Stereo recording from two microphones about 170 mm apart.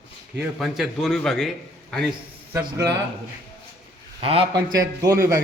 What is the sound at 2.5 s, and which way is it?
Speech, 15° right (ahead or behind).